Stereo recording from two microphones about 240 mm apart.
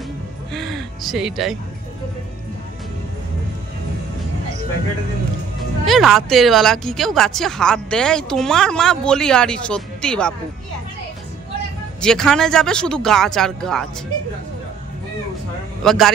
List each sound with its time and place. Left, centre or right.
0.5 s speech: centre
5.9 s speech: centre
12.0 s speech: centre
15.8 s a man's voice: centre